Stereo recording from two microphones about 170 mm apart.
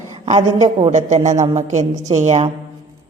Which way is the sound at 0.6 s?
40° right (ahead or behind).